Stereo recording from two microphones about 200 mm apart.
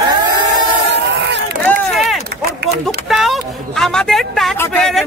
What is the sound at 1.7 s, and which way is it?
Run, centre (ahead or behind).